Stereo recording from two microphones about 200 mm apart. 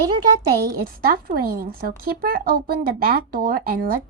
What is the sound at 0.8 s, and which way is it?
A woman's voice, 45° right (ahead or behind).